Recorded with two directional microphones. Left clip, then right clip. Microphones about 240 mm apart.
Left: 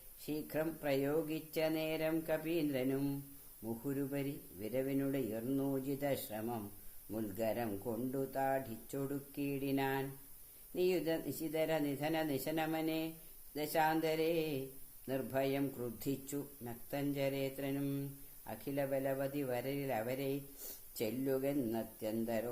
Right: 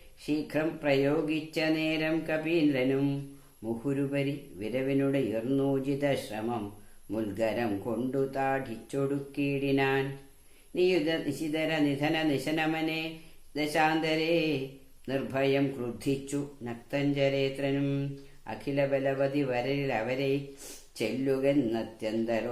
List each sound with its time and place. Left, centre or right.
0.4 s speech: left